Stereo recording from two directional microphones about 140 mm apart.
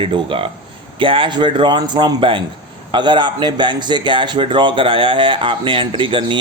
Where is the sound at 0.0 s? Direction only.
40° right (ahead or behind).